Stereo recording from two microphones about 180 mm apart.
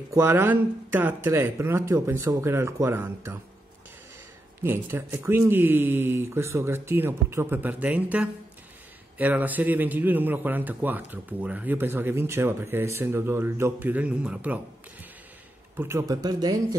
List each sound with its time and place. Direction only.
0.1 s a man's voice: 15° right (ahead or behind)
4.6 s a man's voice: 15° right (ahead or behind)
15.8 s speech: 15° right (ahead or behind)